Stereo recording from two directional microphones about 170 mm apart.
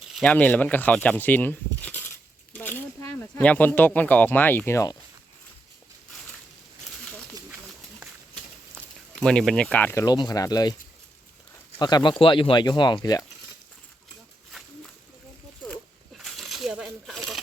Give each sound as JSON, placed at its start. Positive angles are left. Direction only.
{"t": 0.1, "sound": "speech", "side_deg": 5}
{"t": 9.2, "sound": "speech", "side_deg": 5}
{"t": 11.8, "sound": "speech", "side_deg": 25}
{"t": 16.1, "sound": "coin", "side_deg": 0}